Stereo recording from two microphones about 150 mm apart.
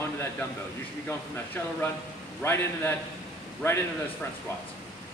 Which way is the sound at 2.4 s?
15° left (ahead or behind).